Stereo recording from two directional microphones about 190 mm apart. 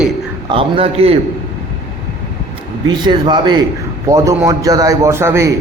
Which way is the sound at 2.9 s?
25° right (ahead or behind).